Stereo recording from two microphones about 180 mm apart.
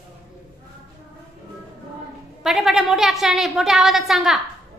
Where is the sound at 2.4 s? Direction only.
Centre (ahead or behind).